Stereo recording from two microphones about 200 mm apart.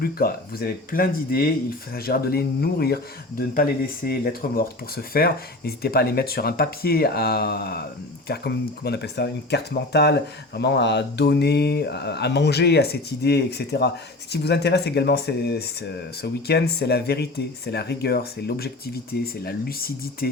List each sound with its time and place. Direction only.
0.0 s speech: 50° left (ahead or behind)